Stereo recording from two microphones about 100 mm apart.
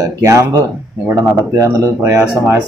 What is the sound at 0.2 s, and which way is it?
Speech, 30° right (ahead or behind).